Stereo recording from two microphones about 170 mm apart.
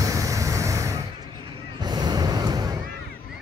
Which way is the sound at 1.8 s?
25° right (ahead or behind).